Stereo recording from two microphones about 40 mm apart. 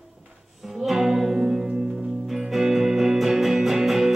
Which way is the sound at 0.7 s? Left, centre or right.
Centre.